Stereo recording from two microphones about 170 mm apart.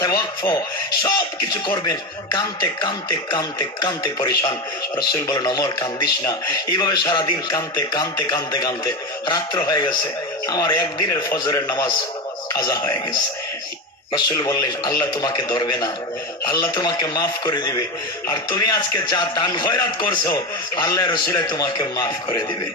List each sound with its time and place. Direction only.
0.0 s speech: 20° left (ahead or behind)
14.1 s speech: 20° left (ahead or behind)